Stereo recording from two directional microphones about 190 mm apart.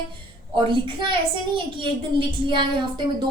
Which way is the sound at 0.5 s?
25° right (ahead or behind).